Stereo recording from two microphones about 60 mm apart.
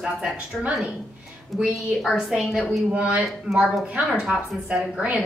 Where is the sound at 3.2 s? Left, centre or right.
Centre.